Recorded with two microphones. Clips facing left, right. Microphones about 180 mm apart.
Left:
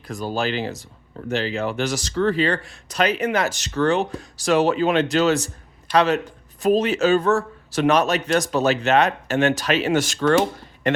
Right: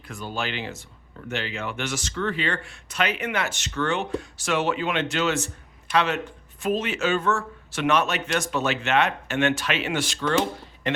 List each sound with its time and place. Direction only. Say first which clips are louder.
0.1 s speech: left 6 dB; 40° left (ahead or behind)